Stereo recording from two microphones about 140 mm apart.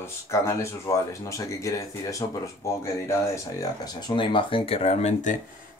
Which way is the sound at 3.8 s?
30° left (ahead or behind).